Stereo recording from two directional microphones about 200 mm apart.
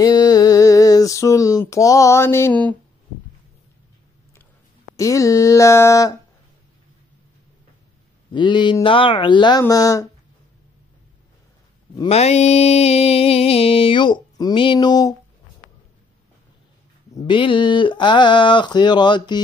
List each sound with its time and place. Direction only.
0.0 s a sound: 20° left (ahead or behind)
4.9 s speech: 15° left (ahead or behind)
8.3 s mantra: 25° left (ahead or behind)
12.0 s mantra: 30° left (ahead or behind)
17.1 s mantra: 25° left (ahead or behind)